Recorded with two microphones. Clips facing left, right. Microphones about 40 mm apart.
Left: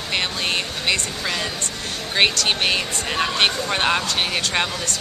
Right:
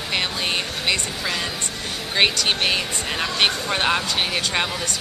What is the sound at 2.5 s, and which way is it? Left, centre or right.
Speech, centre.